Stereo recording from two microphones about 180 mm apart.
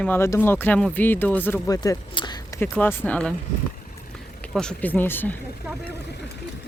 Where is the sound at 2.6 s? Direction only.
10° left (ahead or behind).